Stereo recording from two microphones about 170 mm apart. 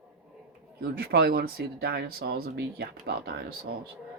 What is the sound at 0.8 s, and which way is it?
Speech, 65° right (ahead or behind).